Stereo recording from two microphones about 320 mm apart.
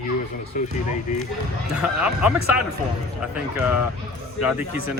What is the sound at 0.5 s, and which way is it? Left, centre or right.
Speech, left.